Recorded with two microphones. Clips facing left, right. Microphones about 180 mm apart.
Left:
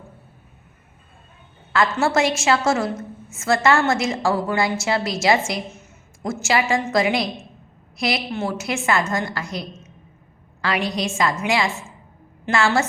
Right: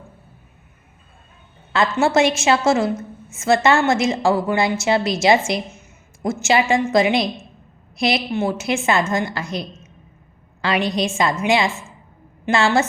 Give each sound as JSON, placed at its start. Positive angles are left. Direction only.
{"t": 1.7, "sound": "a woman's voice", "side_deg": -20}